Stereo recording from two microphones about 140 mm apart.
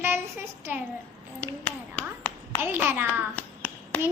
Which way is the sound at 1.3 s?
10° left (ahead or behind).